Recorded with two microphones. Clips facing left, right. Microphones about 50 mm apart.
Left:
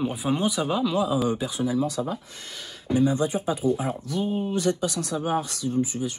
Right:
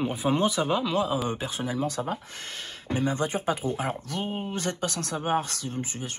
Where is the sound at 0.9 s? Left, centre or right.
Right.